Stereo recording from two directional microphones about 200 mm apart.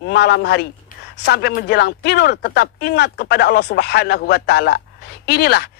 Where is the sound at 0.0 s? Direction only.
55° left (ahead or behind).